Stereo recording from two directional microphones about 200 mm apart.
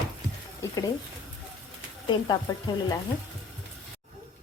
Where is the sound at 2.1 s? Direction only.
20° left (ahead or behind).